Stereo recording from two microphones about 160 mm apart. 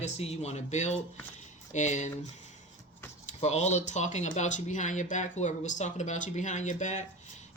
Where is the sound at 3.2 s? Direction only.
45° left (ahead or behind).